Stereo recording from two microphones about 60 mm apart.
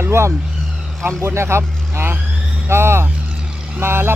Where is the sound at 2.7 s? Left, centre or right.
Right.